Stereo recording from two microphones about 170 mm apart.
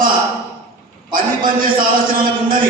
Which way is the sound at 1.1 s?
55° right (ahead or behind).